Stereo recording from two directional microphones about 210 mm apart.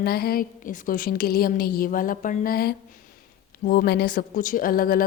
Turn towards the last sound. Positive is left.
turn(degrees=45)  # may be behind; listen again after turning